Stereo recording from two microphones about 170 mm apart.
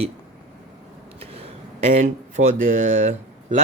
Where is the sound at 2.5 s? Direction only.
50° right (ahead or behind).